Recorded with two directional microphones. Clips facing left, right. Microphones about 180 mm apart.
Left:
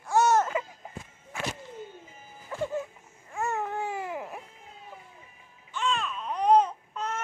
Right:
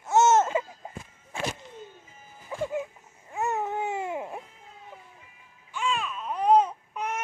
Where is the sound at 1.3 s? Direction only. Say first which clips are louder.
Right 3 dB; 30° right (ahead or behind).